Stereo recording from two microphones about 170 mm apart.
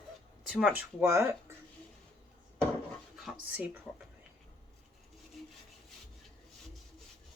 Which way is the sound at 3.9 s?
5° left (ahead or behind).